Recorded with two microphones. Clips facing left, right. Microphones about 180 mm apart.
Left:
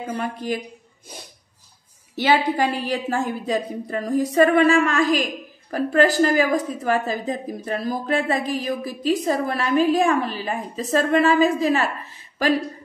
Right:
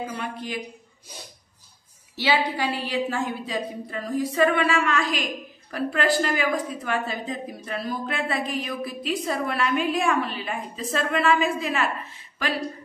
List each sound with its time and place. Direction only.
0.2 s a woman's voice: 40° left (ahead or behind)
2.1 s a woman's voice: 50° left (ahead or behind)